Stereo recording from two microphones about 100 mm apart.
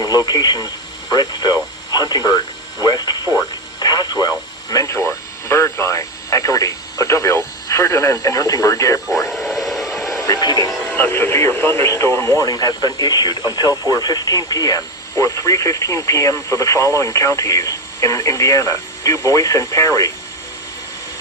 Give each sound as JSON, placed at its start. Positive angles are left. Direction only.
{"t": 0.0, "sound": "speech", "side_deg": 40}
{"t": 3.8, "sound": "radio", "side_deg": 45}
{"t": 9.3, "sound": "radio", "side_deg": 0}
{"t": 10.2, "sound": "speech", "side_deg": 40}
{"t": 10.9, "sound": "speech", "side_deg": 20}